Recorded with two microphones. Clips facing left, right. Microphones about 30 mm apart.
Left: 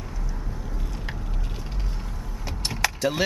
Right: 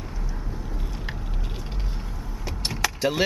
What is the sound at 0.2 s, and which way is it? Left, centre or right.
Vehicle, centre.